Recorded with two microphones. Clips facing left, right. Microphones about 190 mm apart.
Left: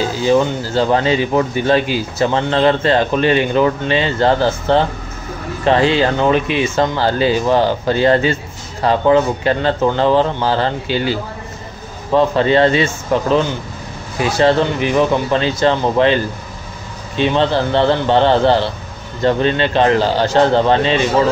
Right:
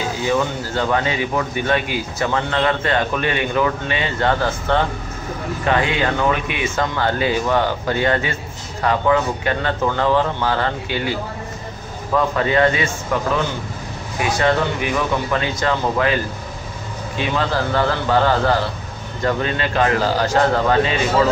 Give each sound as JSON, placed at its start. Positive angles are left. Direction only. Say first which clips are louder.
{"t": 0.2, "sound": "a man's voice", "louder": "left 6 dB", "side_deg": 30}
{"t": 17.2, "sound": "speech", "louder": "left 6 dB", "side_deg": 25}